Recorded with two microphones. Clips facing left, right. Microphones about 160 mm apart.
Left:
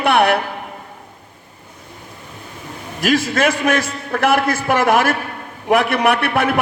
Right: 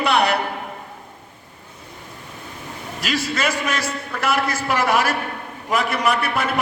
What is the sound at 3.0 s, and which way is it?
A man's voice, 50° left (ahead or behind).